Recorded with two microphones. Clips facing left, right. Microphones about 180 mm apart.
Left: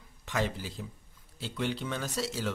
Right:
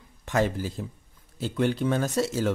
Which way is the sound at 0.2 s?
45° right (ahead or behind).